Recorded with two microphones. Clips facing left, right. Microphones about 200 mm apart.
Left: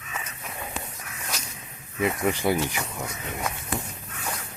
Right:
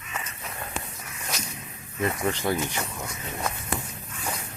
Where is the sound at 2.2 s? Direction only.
10° left (ahead or behind).